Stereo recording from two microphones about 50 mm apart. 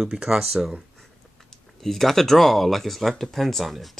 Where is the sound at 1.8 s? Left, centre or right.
Centre.